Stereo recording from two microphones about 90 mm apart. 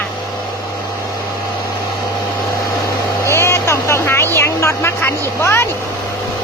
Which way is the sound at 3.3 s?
30° left (ahead or behind).